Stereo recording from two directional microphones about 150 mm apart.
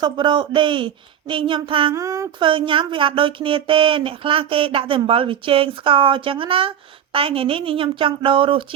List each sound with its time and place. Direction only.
0.0 s speech: 30° right (ahead or behind)
1.9 s a sound: 20° right (ahead or behind)
2.4 s speech: 35° right (ahead or behind)